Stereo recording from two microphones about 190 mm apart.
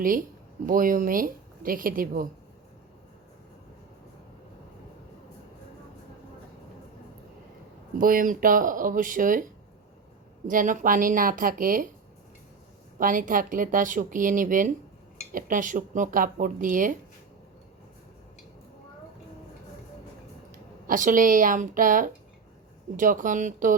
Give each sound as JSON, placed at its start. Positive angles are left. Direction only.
{"t": 0.6, "sound": "speech", "side_deg": -45}
{"t": 7.9, "sound": "speech", "side_deg": -45}
{"t": 10.5, "sound": "speech", "side_deg": -45}
{"t": 13.0, "sound": "speech", "side_deg": -45}
{"t": 20.8, "sound": "speech", "side_deg": -45}